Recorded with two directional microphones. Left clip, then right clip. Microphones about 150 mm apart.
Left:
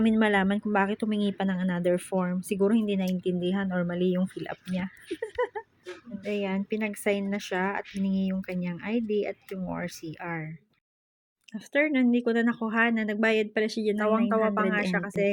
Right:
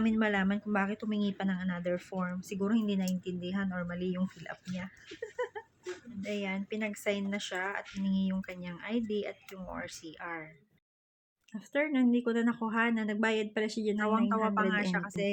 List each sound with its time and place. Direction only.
0.0 s speech: 20° left (ahead or behind)
11.5 s speech: 25° left (ahead or behind)